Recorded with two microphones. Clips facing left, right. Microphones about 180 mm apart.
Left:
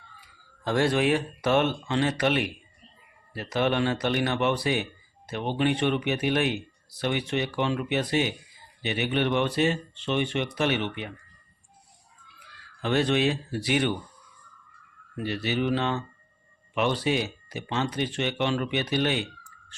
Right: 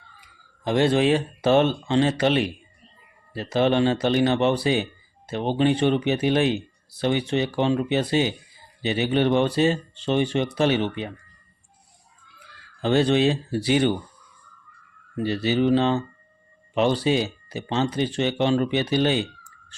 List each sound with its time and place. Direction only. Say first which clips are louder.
0.2 s speech: right 1 dB; 20° right (ahead or behind)
12.8 s speech: right 5 dB; 30° right (ahead or behind)
15.1 s speech: right 6 dB; 30° right (ahead or behind)